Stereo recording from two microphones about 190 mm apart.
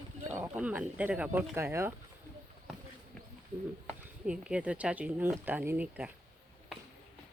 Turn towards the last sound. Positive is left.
turn(degrees=-5)  # may be behind; listen again after turning